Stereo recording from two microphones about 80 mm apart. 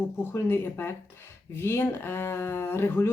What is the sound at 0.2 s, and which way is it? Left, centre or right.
Speech, left.